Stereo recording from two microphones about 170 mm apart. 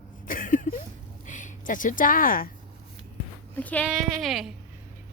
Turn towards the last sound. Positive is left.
turn(degrees=0)  # may be behind; listen again after turning